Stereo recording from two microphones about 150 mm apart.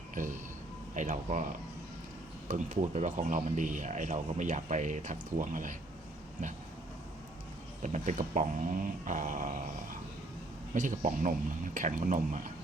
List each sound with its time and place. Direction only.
0.1 s a man's voice: 60° right (ahead or behind)
2.5 s a man's voice: 55° right (ahead or behind)
7.8 s a man's voice: 55° right (ahead or behind)
10.8 s a man's voice: 60° right (ahead or behind)